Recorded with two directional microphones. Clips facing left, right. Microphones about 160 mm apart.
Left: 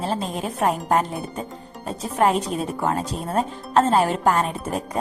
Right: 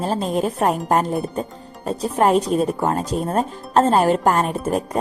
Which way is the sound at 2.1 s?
40° right (ahead or behind).